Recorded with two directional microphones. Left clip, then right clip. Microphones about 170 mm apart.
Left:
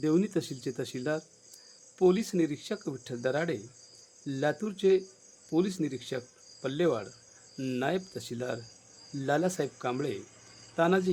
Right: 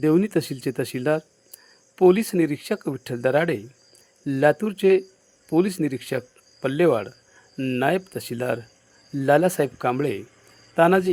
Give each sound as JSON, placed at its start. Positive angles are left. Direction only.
{"t": 0.0, "sound": "speech", "side_deg": -30}